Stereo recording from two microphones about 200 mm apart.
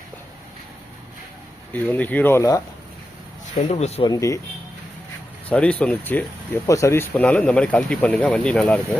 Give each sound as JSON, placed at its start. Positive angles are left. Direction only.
{"t": 1.7, "sound": "speech", "side_deg": 10}
{"t": 3.5, "sound": "speech", "side_deg": 35}
{"t": 4.1, "sound": "speech", "side_deg": 15}
{"t": 5.5, "sound": "speech", "side_deg": 5}